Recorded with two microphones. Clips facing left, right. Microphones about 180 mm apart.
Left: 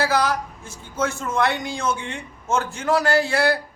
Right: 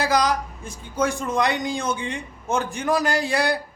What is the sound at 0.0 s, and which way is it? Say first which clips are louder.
Speech: even; 15° right (ahead or behind).